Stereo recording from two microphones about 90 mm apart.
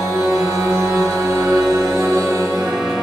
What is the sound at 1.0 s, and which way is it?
Music, 35° right (ahead or behind).